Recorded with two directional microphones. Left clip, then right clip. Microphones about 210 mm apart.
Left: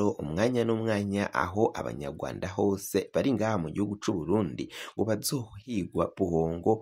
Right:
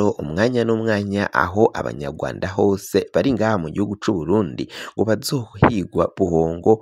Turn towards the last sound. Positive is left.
turn(degrees=-35)  # may be behind; listen again after turning